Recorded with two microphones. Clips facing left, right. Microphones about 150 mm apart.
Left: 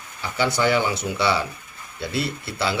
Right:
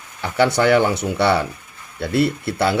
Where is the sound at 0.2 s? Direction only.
65° right (ahead or behind).